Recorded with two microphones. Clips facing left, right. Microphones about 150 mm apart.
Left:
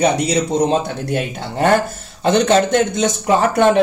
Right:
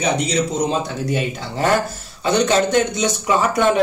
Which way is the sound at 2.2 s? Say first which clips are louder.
Left 3 dB; 50° left (ahead or behind).